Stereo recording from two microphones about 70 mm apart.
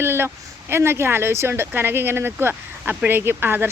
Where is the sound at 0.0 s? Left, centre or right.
Right.